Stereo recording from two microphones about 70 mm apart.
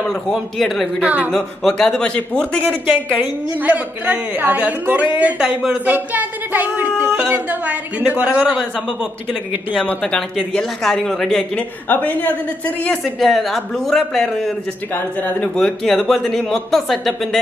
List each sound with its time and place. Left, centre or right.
0.0 s speech: centre
1.0 s a woman's voice: right
1.3 s a man's voice: centre
3.2 s a woman's voice: right
5.4 s speech: centre
5.9 s a woman's voice: right
10.0 s a man's voice: centre
11.5 s a woman's voice: left
13.0 s speech: centre
15.0 s a woman's voice: left
15.5 s speech: centre